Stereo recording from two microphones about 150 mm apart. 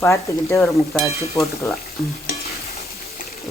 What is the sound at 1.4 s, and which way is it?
Stir, 20° left (ahead or behind).